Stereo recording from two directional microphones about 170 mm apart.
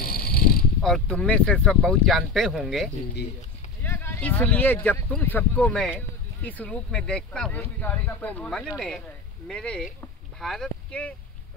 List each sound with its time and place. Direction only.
0.0 s pulleys: 60° left (ahead or behind)
0.8 s speech: 5° left (ahead or behind)
3.8 s a sound: 15° left (ahead or behind)
5.1 s speech: 10° left (ahead or behind)